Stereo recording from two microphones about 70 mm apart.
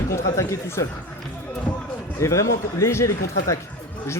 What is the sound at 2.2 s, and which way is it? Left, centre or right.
Speech, left.